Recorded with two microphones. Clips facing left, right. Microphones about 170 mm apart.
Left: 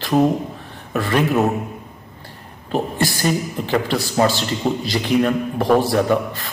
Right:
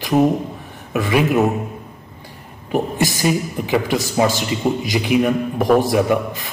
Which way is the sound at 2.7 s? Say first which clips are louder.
Right 2 dB; 15° right (ahead or behind).